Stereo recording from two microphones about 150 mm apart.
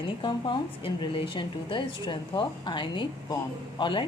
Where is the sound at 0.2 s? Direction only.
30° left (ahead or behind).